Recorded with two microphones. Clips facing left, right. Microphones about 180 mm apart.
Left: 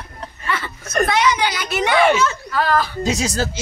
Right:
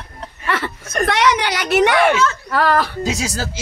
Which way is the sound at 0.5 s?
80° right.